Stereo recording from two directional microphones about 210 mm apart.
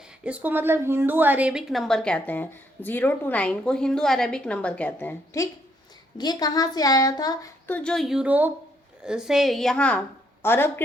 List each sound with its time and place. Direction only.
0.3 s a woman's voice: 5° right (ahead or behind); by 10.8 s 10° left (ahead or behind)